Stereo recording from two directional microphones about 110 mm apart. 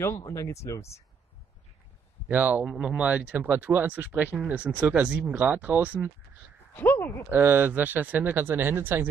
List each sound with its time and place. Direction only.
0.2 s speech: 25° left (ahead or behind)
2.2 s speech: 15° right (ahead or behind)
6.7 s speech: 15° left (ahead or behind)
7.2 s speech: 20° right (ahead or behind)